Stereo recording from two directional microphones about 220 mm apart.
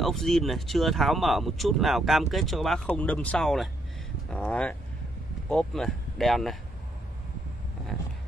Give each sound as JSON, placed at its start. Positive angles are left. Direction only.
{"t": 0.0, "sound": "speech", "side_deg": 0}